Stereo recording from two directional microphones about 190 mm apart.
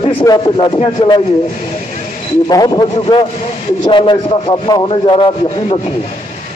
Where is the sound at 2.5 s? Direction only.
20° left (ahead or behind).